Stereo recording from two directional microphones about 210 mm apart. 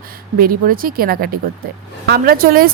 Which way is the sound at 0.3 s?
45° right (ahead or behind).